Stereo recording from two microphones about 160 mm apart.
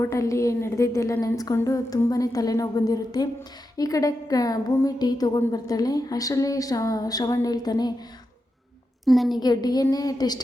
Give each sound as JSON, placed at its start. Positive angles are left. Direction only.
{"t": 0.0, "sound": "a woman's voice", "side_deg": 20}
{"t": 9.0, "sound": "a woman's voice", "side_deg": 0}
{"t": 9.4, "sound": "a woman's voice", "side_deg": 25}